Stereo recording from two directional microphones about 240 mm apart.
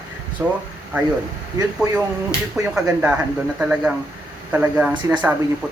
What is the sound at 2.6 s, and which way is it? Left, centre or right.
Speech, centre.